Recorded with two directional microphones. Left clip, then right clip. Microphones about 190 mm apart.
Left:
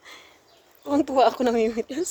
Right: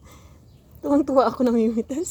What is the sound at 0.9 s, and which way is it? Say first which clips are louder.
Speech: right 1 dB; centre (ahead or behind).